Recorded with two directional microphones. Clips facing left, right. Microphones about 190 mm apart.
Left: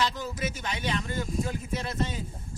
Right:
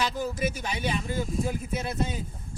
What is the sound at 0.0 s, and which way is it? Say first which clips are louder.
Speech: right 2 dB; 10° right (ahead or behind).